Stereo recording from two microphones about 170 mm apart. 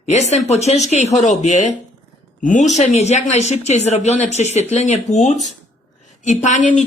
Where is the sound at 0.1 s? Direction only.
40° left (ahead or behind).